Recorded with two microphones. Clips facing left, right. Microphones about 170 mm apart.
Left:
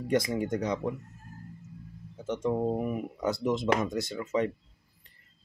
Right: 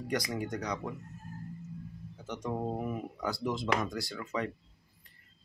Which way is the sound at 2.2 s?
25° left (ahead or behind).